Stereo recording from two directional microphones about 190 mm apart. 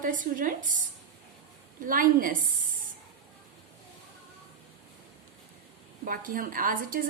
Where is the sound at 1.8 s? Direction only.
45° right (ahead or behind).